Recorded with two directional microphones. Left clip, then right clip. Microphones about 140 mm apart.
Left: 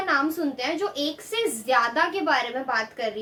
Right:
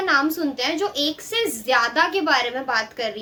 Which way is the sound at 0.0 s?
20° right (ahead or behind).